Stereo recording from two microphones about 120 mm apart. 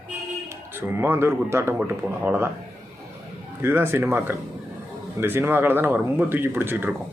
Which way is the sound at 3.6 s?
20° right (ahead or behind).